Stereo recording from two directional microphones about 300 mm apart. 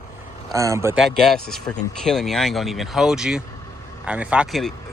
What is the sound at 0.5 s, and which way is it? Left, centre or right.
Speech, centre.